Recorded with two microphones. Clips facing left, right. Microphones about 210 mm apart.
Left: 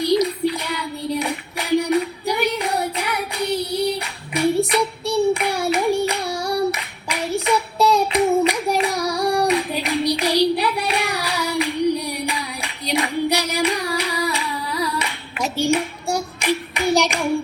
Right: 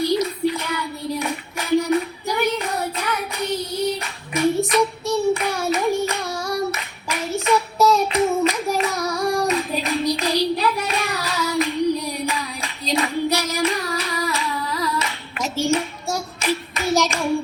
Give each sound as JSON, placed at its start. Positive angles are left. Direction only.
{"t": 0.0, "sound": "child singing", "side_deg": 15}
{"t": 8.1, "sound": "a sound", "side_deg": 15}
{"t": 8.9, "sound": "singing", "side_deg": 15}
{"t": 9.1, "sound": "singing", "side_deg": 35}
{"t": 9.5, "sound": "hands", "side_deg": 15}